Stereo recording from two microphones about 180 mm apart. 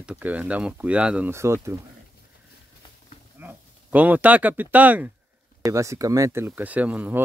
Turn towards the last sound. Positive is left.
turn(degrees=-10)  # may be behind; listen again after turning